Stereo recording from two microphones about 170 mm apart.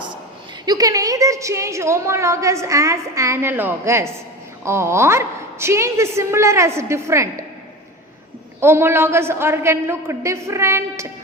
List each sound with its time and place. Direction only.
0.6 s a woman's voice: 20° right (ahead or behind)
8.6 s a woman's voice: 15° right (ahead or behind)